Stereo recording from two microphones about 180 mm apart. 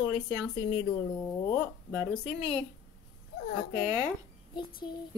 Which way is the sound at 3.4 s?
55° left (ahead or behind).